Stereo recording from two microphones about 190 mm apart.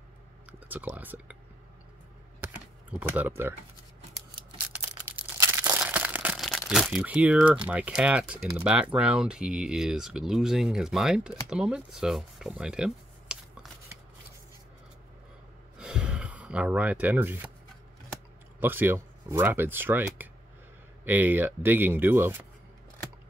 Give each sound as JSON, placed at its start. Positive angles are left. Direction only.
{"t": 0.5, "sound": "speech", "side_deg": -10}
{"t": 2.4, "sound": "computer keyboard", "side_deg": -10}
{"t": 5.4, "sound": "speech", "side_deg": -10}
{"t": 15.8, "sound": "camera", "side_deg": -5}
{"t": 18.6, "sound": "speech", "side_deg": -10}